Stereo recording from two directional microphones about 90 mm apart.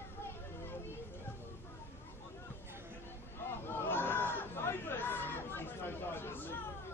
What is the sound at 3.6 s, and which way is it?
Chatter, 25° left (ahead or behind).